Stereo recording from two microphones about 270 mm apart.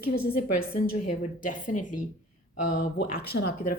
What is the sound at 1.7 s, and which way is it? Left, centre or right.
Speech, left.